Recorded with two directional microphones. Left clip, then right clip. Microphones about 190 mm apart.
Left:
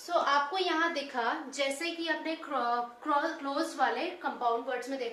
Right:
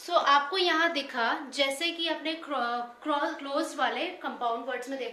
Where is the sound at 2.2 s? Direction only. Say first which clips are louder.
Right 1 dB; 20° right (ahead or behind).